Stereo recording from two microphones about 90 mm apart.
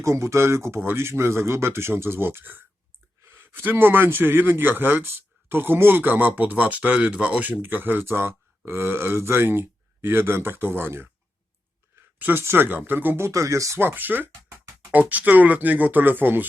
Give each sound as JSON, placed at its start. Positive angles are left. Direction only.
{"t": 0.0, "sound": "speech", "side_deg": -35}
{"t": 12.2, "sound": "speech", "side_deg": -25}